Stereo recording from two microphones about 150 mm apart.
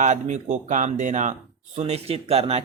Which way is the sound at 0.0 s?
55° right (ahead or behind).